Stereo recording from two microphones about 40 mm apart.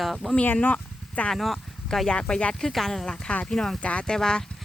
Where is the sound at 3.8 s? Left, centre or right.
Left.